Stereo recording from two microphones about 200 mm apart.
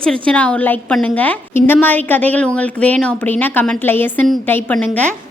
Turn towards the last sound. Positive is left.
turn(degrees=5)  # may be behind; listen again after turning